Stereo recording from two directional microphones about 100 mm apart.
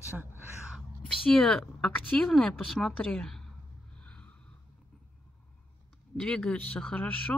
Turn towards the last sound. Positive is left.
turn(degrees=10)  # may be behind; listen again after turning